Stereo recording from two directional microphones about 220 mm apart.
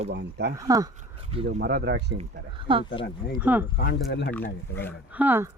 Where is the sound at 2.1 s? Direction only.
25° right (ahead or behind).